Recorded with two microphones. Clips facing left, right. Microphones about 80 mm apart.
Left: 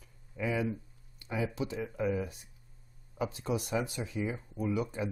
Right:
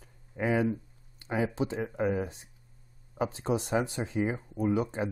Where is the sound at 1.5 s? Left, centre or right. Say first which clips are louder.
Right 4 dB; right.